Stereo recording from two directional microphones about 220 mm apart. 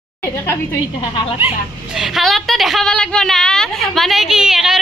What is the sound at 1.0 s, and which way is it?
Speech, 20° left (ahead or behind).